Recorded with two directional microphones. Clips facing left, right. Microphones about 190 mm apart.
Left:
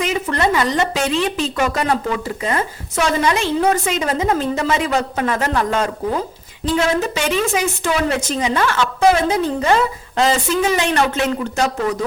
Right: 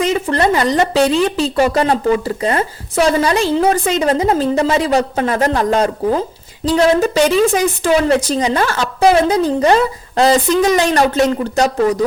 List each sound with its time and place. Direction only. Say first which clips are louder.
0.0 s a woman's voice: right 4 dB; 35° right (ahead or behind)